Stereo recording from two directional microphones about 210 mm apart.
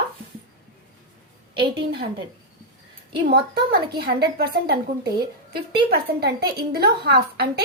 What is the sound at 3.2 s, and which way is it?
A woman's voice, 45° right (ahead or behind).